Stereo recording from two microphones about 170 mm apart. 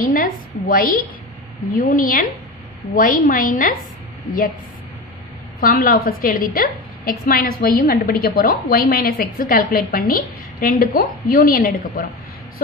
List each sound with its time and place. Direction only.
0.0 s a woman's voice: 55° left (ahead or behind)
5.6 s a woman's voice: 55° left (ahead or behind)